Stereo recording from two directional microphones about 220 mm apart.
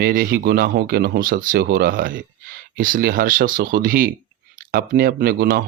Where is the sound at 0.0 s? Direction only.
45° right (ahead or behind).